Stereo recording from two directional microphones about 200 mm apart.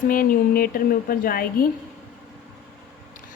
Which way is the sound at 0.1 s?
45° left (ahead or behind).